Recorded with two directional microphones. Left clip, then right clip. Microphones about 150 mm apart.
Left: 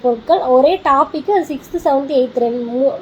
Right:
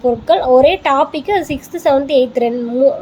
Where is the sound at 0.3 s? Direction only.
20° right (ahead or behind).